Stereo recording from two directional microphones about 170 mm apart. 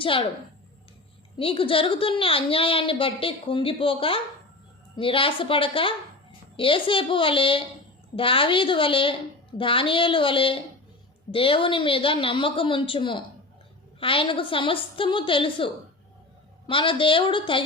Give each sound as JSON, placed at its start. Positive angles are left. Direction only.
{"t": 0.0, "sound": "a woman's voice", "side_deg": 30}
{"t": 1.4, "sound": "a woman's voice", "side_deg": 30}